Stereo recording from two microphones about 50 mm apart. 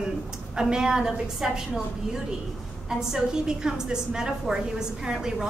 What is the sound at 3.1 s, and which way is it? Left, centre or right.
A woman's voice, centre.